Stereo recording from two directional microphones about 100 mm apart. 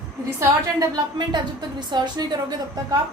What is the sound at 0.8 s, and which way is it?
A woman's voice, 45° right (ahead or behind).